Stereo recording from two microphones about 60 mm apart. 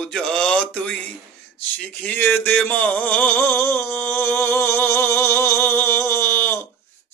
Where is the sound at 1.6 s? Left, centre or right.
Left.